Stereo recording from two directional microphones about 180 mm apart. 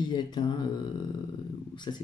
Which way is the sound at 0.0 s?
25° left (ahead or behind).